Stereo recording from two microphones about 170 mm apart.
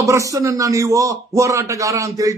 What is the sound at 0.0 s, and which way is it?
A man's voice, 20° right (ahead or behind).